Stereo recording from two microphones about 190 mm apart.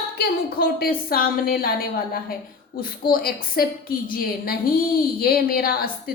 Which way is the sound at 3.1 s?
50° left (ahead or behind).